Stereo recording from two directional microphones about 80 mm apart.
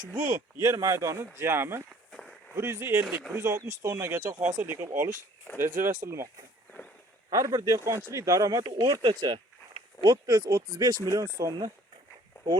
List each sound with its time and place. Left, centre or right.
0.1 s speech: right
7.3 s speech: right